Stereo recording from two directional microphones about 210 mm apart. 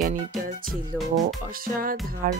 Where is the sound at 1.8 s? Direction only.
45° right (ahead or behind).